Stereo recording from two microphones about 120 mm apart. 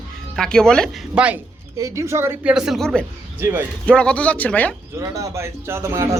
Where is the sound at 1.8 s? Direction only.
25° right (ahead or behind).